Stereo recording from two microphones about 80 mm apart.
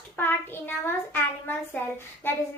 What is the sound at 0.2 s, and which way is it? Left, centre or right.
Child singing, left.